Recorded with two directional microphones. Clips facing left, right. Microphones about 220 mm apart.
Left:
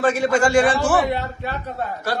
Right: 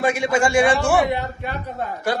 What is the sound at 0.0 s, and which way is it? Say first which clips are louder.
A man's voice: left 2 dB; 10° right (ahead or behind).